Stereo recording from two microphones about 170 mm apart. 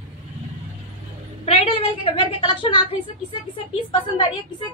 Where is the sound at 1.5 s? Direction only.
35° left (ahead or behind).